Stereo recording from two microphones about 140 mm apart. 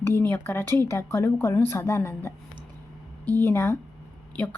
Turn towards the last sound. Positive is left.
turn(degrees=10)  # may be behind; listen again after turning